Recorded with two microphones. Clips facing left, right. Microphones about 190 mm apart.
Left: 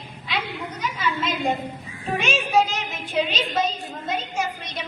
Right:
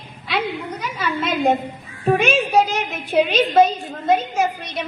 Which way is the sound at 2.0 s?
55° right (ahead or behind).